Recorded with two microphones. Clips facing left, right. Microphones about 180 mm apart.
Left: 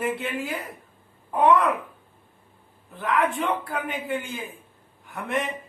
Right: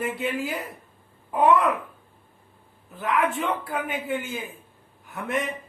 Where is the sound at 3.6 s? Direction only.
5° right (ahead or behind).